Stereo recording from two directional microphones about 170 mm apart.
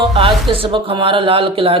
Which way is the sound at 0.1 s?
30° right (ahead or behind).